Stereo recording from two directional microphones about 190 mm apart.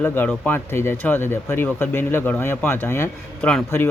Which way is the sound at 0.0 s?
10° left (ahead or behind).